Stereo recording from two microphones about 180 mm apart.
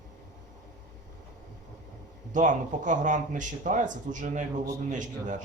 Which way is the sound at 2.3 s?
45° right (ahead or behind).